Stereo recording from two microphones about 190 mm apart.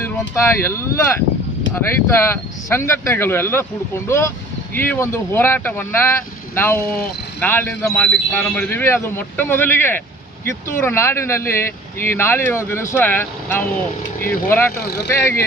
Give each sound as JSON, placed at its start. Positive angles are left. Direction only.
{"t": 0.0, "sound": "speech", "side_deg": 15}
{"t": 4.7, "sound": "speech", "side_deg": 10}
{"t": 14.2, "sound": "speech", "side_deg": 50}
{"t": 14.8, "sound": "speech", "side_deg": 60}
{"t": 15.1, "sound": "speech", "side_deg": 10}